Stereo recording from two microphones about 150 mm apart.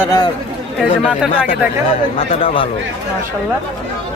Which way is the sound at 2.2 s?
40° left (ahead or behind).